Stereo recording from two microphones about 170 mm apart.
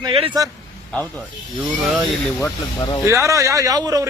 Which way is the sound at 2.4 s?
25° left (ahead or behind).